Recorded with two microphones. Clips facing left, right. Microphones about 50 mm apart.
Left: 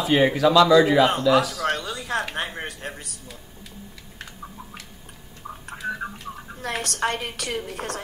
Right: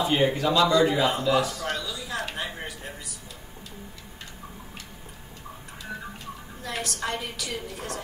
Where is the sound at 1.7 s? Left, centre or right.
Left.